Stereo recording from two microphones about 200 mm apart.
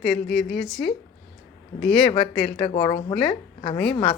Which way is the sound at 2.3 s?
5° left (ahead or behind).